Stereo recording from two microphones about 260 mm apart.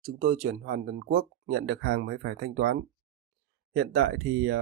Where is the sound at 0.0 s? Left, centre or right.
Right.